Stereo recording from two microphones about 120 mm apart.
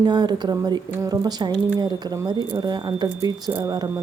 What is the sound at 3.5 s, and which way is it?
Speech, 20° right (ahead or behind).